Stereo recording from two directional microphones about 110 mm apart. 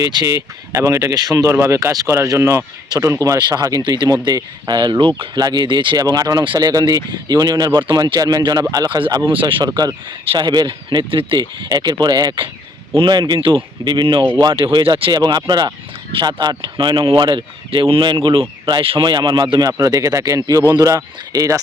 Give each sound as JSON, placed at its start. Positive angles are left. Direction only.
{"t": 0.0, "sound": "speech", "side_deg": -40}
{"t": 1.5, "sound": "speech", "side_deg": -25}
{"t": 9.0, "sound": "speech", "side_deg": -45}
{"t": 9.6, "sound": "speech", "side_deg": -35}